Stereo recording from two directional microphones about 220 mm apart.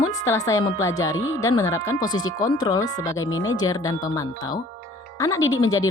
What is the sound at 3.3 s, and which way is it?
Speech, 65° left (ahead or behind).